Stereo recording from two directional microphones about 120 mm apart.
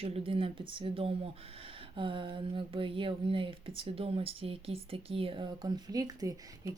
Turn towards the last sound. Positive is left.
turn(degrees=-30)  # may be behind; listen again after turning